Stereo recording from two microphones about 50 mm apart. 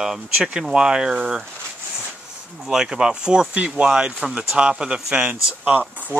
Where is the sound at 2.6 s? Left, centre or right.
Centre.